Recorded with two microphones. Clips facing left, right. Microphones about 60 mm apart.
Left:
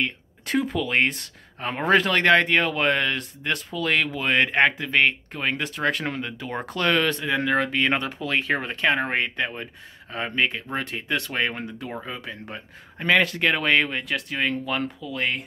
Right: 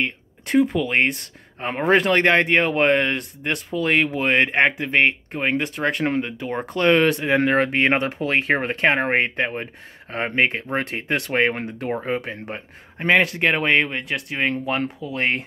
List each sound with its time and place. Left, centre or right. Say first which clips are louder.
0.5 s speech: right 6 dB; centre
0.7 s speech: right 2 dB; centre
2.4 s speech: right 4 dB; right
5.8 s speech: right 2 dB; centre
6.0 s speech: right 6 dB; right
14.3 s speech: right 4 dB; right